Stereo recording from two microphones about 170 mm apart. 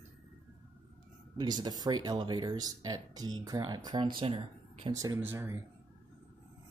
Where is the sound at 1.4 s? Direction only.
25° right (ahead or behind).